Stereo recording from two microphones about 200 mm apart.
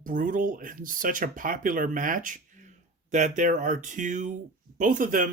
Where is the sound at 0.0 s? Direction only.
40° right (ahead or behind).